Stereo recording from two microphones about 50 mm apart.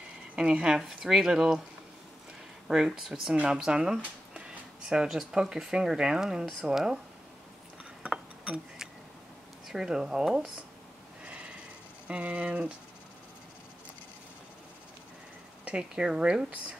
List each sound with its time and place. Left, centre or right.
0.4 s speech: centre
2.7 s speech: centre
9.7 s speech: centre
11.2 s a sound: right
12.1 s speech: right
15.6 s speech: centre